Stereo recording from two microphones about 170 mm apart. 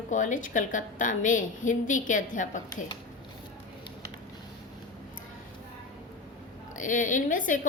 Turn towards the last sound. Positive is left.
turn(degrees=50)  # may be behind; listen again after turning